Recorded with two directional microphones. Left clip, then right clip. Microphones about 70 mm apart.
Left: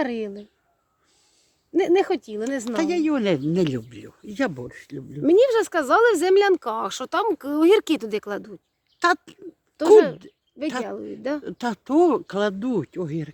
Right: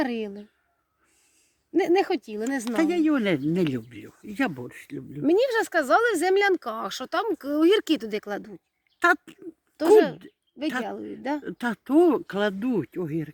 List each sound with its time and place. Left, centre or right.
0.0 s speech: left
1.7 s speech: left
3.0 s speech: left
4.3 s speech: left
4.5 s speech: centre
5.2 s speech: left
9.0 s speech: left